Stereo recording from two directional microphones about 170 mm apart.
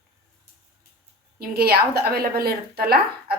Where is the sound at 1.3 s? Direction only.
65° right (ahead or behind).